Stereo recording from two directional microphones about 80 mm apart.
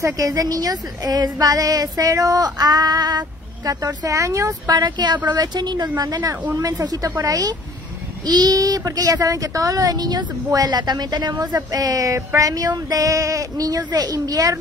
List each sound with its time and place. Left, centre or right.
0.0 s speech: right
4.6 s speech: right
11.5 s speech: right